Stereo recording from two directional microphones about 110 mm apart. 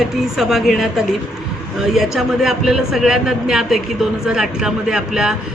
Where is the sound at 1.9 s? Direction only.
Centre (ahead or behind).